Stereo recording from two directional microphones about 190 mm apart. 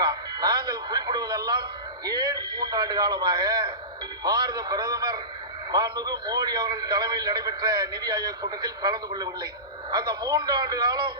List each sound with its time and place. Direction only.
0.0 s radio: 20° right (ahead or behind)
2.0 s a man's voice: 20° right (ahead or behind)